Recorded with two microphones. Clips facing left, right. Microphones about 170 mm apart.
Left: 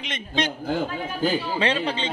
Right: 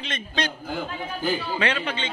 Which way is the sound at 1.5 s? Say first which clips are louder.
Left 2 dB; 30° left (ahead or behind).